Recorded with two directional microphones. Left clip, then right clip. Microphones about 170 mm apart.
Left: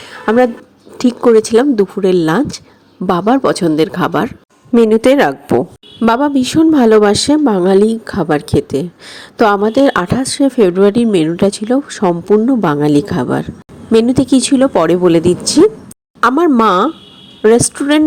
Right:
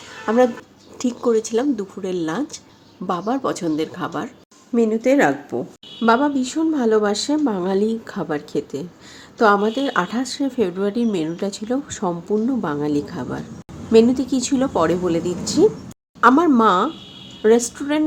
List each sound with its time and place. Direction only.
0.3 s speech: 40° left (ahead or behind)
4.8 s speech: 60° left (ahead or behind)
6.0 s speech: 50° left (ahead or behind)